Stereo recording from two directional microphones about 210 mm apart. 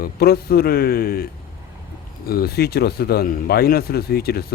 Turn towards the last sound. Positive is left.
turn(degrees=50)  # may be behind; listen again after turning